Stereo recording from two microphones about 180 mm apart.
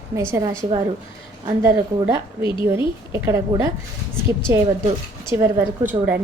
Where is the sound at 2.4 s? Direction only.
25° left (ahead or behind).